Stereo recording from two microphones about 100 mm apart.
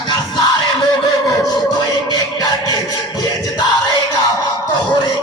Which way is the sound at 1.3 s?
40° left (ahead or behind).